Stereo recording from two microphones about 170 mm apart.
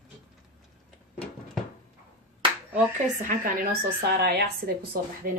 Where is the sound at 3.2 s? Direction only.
55° right (ahead or behind).